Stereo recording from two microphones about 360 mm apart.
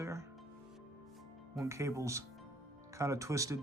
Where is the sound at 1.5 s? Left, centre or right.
Centre.